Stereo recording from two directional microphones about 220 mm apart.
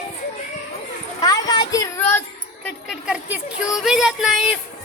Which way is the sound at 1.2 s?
15° left (ahead or behind).